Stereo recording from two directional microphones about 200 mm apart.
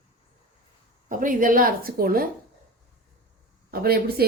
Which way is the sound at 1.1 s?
40° right (ahead or behind).